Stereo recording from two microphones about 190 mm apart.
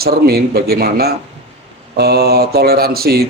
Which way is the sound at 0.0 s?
55° right (ahead or behind).